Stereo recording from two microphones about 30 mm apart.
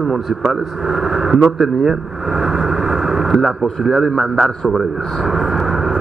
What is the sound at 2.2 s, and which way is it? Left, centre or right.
Vehicle, right.